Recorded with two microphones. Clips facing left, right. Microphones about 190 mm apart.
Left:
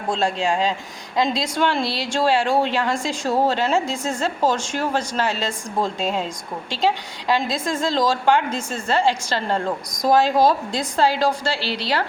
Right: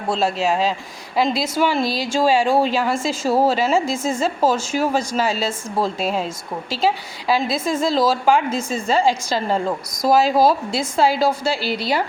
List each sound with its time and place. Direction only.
0.1 s a woman's voice: 5° right (ahead or behind)